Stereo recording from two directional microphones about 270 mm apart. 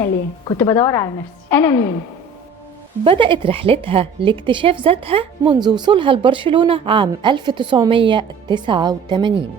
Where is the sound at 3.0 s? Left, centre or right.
Centre.